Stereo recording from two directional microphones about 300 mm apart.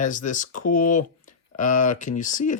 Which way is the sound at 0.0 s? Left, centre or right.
Left.